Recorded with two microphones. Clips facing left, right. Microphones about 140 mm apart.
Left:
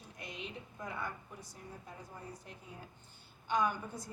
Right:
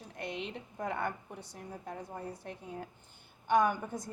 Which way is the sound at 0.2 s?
65° right (ahead or behind).